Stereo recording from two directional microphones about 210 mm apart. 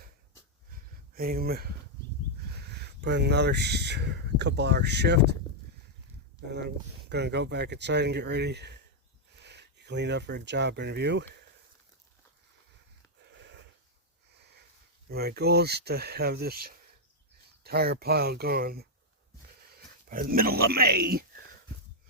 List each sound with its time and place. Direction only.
1.1 s speech: 45° right (ahead or behind)
6.5 s speech: 50° right (ahead or behind)
13.2 s a sound: 55° right (ahead or behind)
15.1 s speech: 50° right (ahead or behind)